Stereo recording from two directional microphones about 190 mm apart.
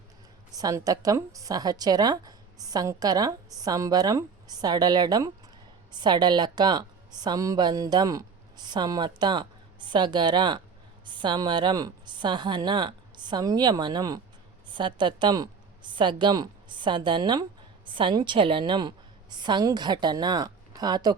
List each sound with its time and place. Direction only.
0.5 s a woman's voice: 20° right (ahead or behind)